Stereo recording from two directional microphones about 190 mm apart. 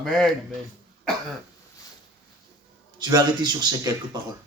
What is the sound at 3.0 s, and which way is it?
Speech, 20° right (ahead or behind).